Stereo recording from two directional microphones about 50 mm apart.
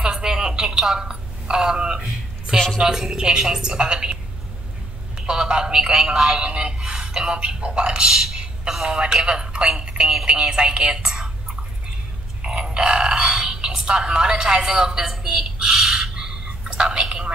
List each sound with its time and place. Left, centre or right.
0.0 s telephone: centre
2.8 s a woman's voice: centre
12.4 s burping: centre